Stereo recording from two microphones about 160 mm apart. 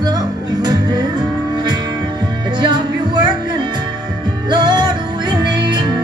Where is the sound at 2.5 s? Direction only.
30° right (ahead or behind).